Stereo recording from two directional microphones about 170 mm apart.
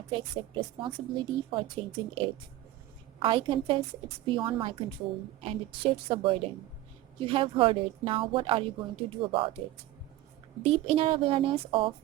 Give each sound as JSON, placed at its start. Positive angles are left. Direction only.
{"t": 0.1, "sound": "a woman's voice", "side_deg": -30}
{"t": 10.6, "sound": "a woman's voice", "side_deg": -35}